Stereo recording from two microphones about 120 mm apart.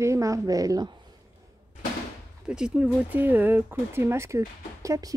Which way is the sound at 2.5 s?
5° right (ahead or behind).